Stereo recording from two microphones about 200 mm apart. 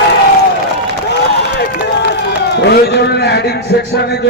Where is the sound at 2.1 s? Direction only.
60° left (ahead or behind).